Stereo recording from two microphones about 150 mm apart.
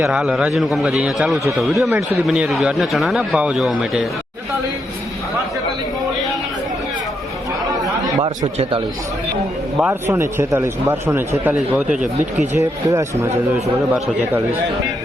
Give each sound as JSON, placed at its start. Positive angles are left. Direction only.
{"t": 0.1, "sound": "a man's voice", "side_deg": -5}
{"t": 8.0, "sound": "chatter", "side_deg": -25}
{"t": 9.8, "sound": "a man's voice", "side_deg": -15}
{"t": 12.5, "sound": "a man's voice", "side_deg": -20}